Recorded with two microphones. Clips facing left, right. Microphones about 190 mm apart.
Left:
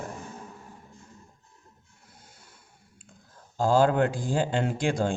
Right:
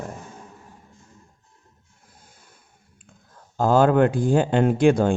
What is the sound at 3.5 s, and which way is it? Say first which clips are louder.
Speech: right 5 dB; 60° right (ahead or behind).